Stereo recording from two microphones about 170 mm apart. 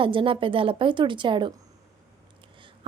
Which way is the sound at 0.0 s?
30° right (ahead or behind).